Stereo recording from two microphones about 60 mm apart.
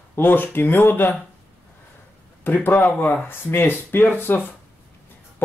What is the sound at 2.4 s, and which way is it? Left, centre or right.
Speech, left.